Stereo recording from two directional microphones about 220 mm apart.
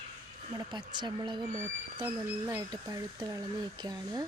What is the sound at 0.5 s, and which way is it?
Speech, 20° right (ahead or behind).